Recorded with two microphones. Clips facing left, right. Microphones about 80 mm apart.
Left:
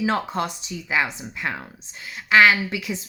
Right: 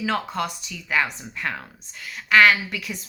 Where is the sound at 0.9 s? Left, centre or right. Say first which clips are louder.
Even; centre.